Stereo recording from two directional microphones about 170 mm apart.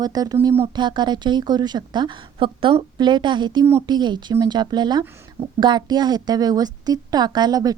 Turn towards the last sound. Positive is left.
turn(degrees=-20)  # may be behind; listen again after turning